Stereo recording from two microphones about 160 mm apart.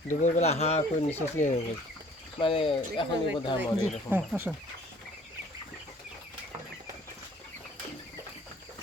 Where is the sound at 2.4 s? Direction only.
35° left (ahead or behind).